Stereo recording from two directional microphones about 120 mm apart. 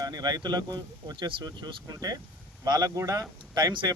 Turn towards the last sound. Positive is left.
turn(degrees=-35)  # may be behind; listen again after turning